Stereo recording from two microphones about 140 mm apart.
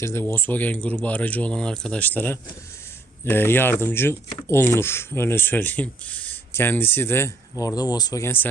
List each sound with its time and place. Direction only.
0.0 s speech: 20° left (ahead or behind)